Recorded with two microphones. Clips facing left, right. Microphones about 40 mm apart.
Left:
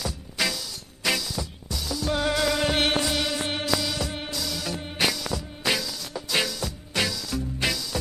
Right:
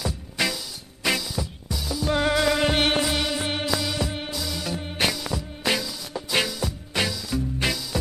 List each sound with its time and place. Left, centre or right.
0.0 s music: centre